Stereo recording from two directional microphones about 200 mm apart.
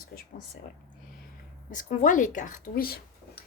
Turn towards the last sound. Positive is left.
turn(degrees=50)  # may be behind; listen again after turning